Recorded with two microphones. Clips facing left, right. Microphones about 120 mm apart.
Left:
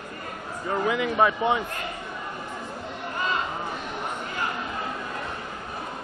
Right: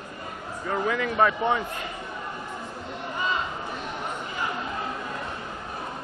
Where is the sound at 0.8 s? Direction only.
20° left (ahead or behind).